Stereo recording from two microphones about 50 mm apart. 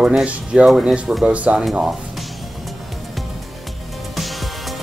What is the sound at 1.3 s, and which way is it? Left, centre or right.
Speech, right.